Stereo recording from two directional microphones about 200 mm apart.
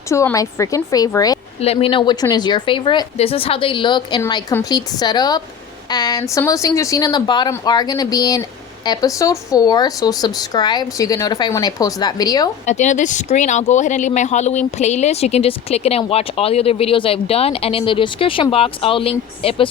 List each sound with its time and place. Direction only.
0.1 s a woman's voice: 15° left (ahead or behind)
1.6 s a woman's voice: 30° left (ahead or behind)
12.6 s speech: 35° left (ahead or behind)